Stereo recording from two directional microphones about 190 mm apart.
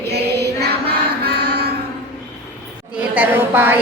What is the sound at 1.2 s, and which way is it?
Music, 60° right (ahead or behind).